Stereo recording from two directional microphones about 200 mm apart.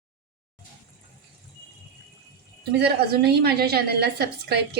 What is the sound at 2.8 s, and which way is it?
A woman's voice, 55° right (ahead or behind).